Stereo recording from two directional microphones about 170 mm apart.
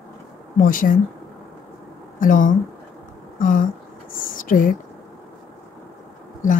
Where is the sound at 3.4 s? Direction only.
50° left (ahead or behind).